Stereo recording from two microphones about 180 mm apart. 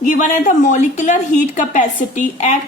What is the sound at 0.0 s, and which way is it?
A woman's voice, 45° left (ahead or behind).